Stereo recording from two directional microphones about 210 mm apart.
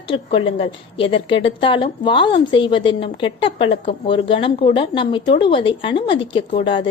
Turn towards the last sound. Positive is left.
turn(degrees=25)  # may be behind; listen again after turning